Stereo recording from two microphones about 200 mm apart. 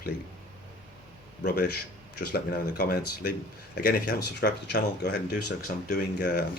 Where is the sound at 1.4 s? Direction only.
50° left (ahead or behind).